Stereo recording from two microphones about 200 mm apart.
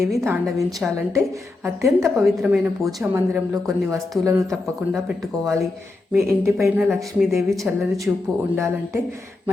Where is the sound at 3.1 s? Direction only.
15° right (ahead or behind).